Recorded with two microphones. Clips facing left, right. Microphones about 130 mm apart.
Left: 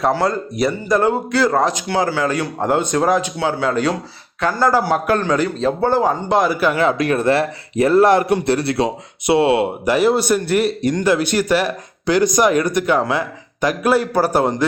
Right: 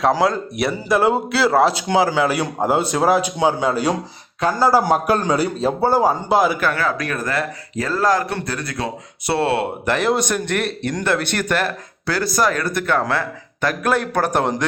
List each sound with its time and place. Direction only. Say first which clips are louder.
0.1 s a man's voice: even; 5° right (ahead or behind)
6.6 s speech: left 4 dB; 15° left (ahead or behind)
6.8 s speech: left 7 dB; 25° left (ahead or behind)
9.2 s speech: left 5 dB; 15° left (ahead or behind)